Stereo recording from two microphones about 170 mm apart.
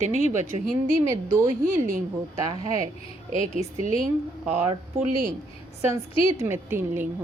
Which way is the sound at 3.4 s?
50° right (ahead or behind).